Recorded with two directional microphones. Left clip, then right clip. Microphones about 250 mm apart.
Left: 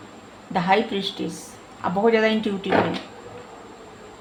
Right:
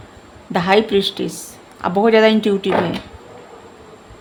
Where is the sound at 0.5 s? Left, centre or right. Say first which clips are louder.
Right 6 dB; right.